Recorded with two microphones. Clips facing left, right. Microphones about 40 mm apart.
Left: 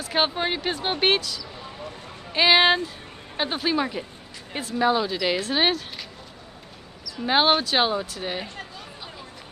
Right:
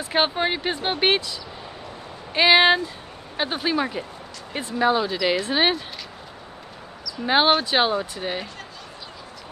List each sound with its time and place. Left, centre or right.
0.1 s speech: centre
7.2 s speech: centre